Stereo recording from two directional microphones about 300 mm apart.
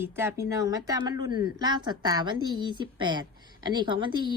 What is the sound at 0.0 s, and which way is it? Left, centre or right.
Speech, centre.